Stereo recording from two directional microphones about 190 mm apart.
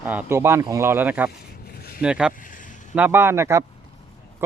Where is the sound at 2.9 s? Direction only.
10° right (ahead or behind).